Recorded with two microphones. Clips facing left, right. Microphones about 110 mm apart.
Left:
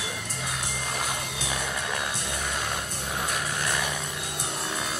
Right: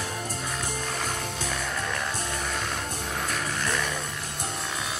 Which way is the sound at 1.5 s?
5° left (ahead or behind).